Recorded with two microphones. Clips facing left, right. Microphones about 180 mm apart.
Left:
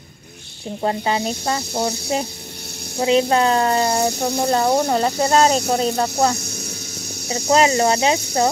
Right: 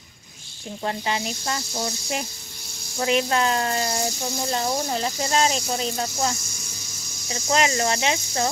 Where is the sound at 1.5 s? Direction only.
60° left (ahead or behind).